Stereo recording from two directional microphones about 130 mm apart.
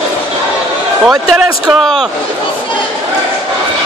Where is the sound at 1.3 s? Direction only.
5° right (ahead or behind).